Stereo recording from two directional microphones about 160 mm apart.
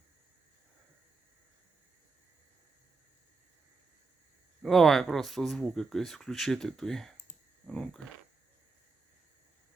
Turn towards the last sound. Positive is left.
turn(degrees=5)  # may be behind; listen again after turning